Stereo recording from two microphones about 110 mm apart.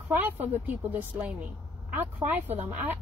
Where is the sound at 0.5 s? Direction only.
15° right (ahead or behind).